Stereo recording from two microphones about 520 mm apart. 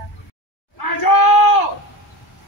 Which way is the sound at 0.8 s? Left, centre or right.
Left.